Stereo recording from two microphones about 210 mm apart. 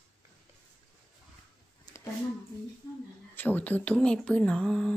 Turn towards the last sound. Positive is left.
turn(degrees=5)  # may be behind; listen again after turning